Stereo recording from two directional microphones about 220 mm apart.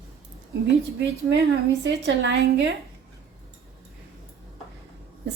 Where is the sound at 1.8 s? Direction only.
55° right (ahead or behind).